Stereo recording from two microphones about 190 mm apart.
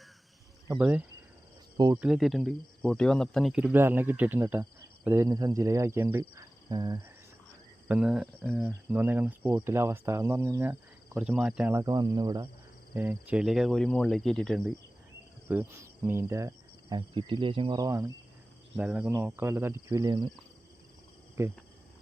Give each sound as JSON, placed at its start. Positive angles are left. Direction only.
{"t": 0.7, "sound": "speech", "side_deg": -10}
{"t": 7.9, "sound": "speech", "side_deg": -5}
{"t": 12.9, "sound": "speech", "side_deg": -10}
{"t": 21.4, "sound": "speech", "side_deg": -15}